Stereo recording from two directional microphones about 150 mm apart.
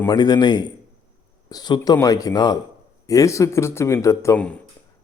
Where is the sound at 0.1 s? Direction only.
30° left (ahead or behind).